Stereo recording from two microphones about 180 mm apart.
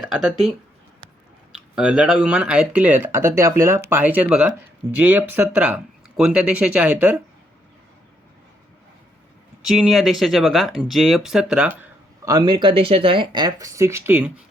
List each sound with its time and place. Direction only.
0.3 s speech: centre (ahead or behind)
1.5 s speech: 5° right (ahead or behind)
9.6 s speech: 5° right (ahead or behind)
11.8 s speech: 20° right (ahead or behind)